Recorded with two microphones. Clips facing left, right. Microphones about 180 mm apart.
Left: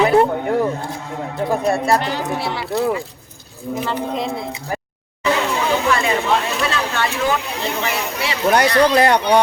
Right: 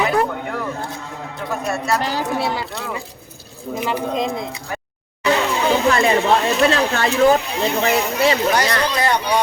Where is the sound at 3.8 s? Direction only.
15° right (ahead or behind).